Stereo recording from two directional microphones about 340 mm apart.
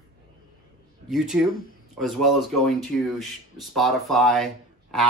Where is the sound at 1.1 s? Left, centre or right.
Centre.